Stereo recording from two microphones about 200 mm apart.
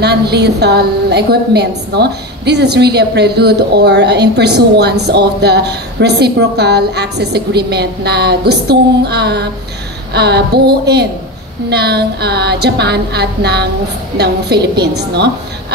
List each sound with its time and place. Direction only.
0.0 s a woman's voice: 55° right (ahead or behind)